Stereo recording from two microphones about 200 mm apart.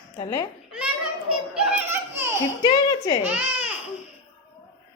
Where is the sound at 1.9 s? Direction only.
10° right (ahead or behind).